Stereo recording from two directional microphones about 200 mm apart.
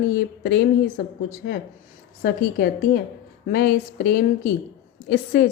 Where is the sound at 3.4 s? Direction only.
55° left (ahead or behind).